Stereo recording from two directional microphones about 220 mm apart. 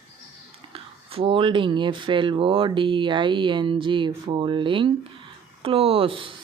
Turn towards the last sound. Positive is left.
turn(degrees=-25)  # may be behind; listen again after turning